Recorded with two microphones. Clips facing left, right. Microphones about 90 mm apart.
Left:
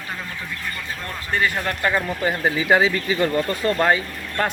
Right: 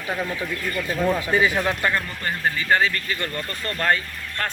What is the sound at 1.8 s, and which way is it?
Speech, 10° left (ahead or behind).